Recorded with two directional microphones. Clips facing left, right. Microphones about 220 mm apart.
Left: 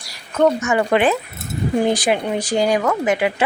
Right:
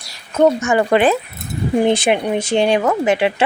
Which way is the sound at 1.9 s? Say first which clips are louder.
Right 3 dB; 25° right (ahead or behind).